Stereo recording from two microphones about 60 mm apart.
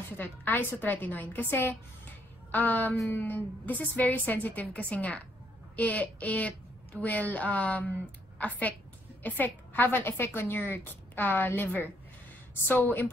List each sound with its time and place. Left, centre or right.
0.2 s a woman's voice: left
9.2 s a woman's voice: left